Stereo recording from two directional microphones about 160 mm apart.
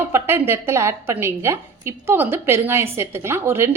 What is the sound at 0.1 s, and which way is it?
A woman's voice, 15° right (ahead or behind).